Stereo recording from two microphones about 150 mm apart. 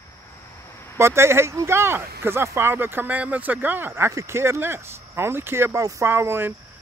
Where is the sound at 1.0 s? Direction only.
15° right (ahead or behind).